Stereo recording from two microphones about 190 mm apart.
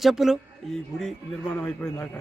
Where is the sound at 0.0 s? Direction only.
Centre (ahead or behind).